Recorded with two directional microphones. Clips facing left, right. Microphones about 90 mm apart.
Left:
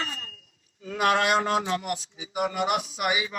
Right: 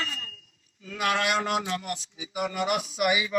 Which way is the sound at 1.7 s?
20° left (ahead or behind).